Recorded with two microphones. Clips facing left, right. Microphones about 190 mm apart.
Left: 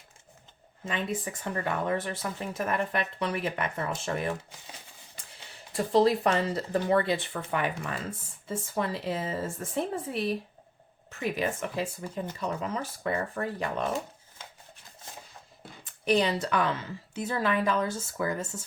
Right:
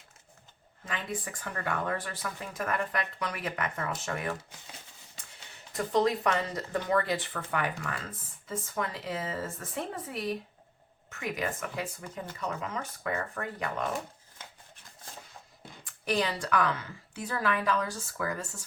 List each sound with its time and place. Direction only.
0.9 s speech: 25° left (ahead or behind)
5.7 s speech: 30° left (ahead or behind)
12.4 s speech: 30° left (ahead or behind)
15.8 s speech: 25° left (ahead or behind)